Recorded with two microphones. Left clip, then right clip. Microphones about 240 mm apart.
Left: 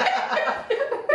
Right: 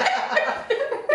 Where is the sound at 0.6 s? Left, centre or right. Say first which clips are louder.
Even; centre.